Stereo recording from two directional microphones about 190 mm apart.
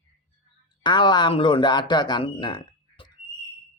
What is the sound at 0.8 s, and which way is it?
Speech, 25° left (ahead or behind).